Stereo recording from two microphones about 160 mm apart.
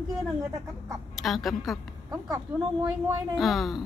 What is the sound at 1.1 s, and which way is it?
Speech, centre (ahead or behind).